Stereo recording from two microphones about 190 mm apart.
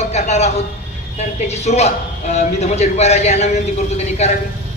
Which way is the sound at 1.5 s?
35° left (ahead or behind).